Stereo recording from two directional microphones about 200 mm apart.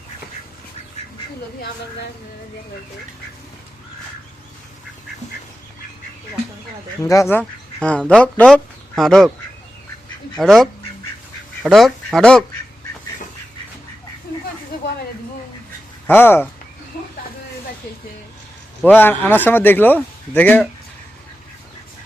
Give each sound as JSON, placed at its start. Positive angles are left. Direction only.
{"t": 7.0, "sound": "speech", "side_deg": 15}
{"t": 10.3, "sound": "speech", "side_deg": 0}
{"t": 16.0, "sound": "a man's voice", "side_deg": 10}
{"t": 18.8, "sound": "a man's voice", "side_deg": 5}